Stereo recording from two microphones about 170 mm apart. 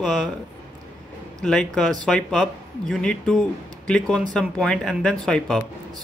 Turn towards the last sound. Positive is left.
turn(degrees=5)  # may be behind; listen again after turning